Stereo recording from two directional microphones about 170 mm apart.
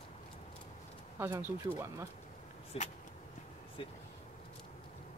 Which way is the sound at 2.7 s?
35° left (ahead or behind).